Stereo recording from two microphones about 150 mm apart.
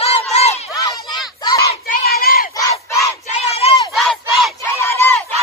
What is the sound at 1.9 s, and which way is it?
Crowd, 90° left.